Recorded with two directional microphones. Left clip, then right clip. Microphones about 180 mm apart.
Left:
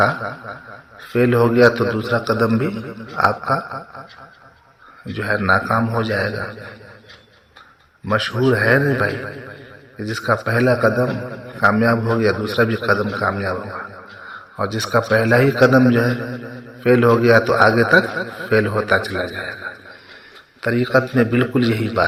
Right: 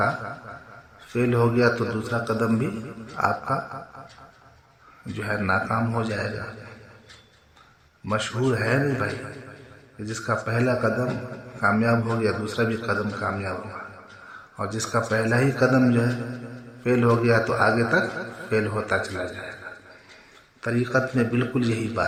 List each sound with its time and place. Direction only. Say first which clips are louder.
0.0 s a man's voice: left 7 dB; 20° left (ahead or behind)
5.1 s a man's voice: left 7 dB; 15° left (ahead or behind)
8.0 s a man's voice: left 7 dB; 20° left (ahead or behind)